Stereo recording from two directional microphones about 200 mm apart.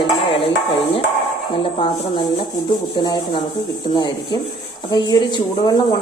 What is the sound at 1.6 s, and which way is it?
Speech, 25° left (ahead or behind).